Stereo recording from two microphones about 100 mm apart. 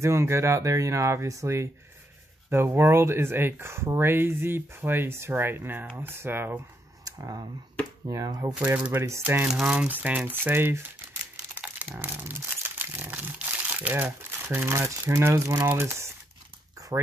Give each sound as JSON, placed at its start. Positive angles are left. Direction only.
{"t": 0.0, "sound": "speech", "side_deg": -30}
{"t": 7.1, "sound": "speech", "side_deg": -40}
{"t": 8.5, "sound": "speech", "side_deg": -15}
{"t": 11.9, "sound": "speech", "side_deg": -20}
{"t": 14.7, "sound": "speech", "side_deg": -30}